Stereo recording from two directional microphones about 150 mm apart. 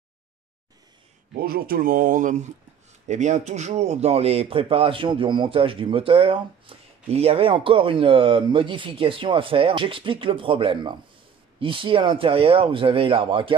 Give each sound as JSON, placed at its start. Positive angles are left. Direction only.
{"t": 1.3, "sound": "speech", "side_deg": -80}